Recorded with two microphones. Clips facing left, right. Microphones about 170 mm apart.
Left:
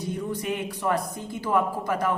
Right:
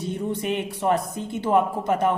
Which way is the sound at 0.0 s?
25° right (ahead or behind).